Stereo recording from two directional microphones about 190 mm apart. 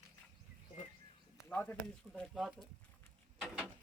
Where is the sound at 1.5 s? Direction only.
10° left (ahead or behind).